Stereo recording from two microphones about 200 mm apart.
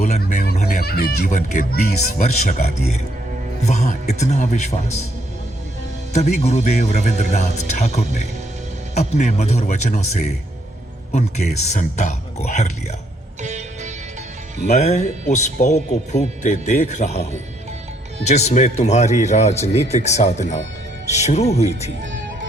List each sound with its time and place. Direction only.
0.0 s music: 35° left (ahead or behind)
0.5 s music: 45° left (ahead or behind)
1.3 s speech: 35° left (ahead or behind)
4.1 s speech: 35° left (ahead or behind)
6.1 s speech: 35° left (ahead or behind)
13.4 s music: 35° right (ahead or behind)
14.7 s speech: 35° left (ahead or behind)